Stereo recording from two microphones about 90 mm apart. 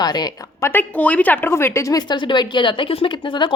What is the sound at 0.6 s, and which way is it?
A woman's voice, 20° left (ahead or behind).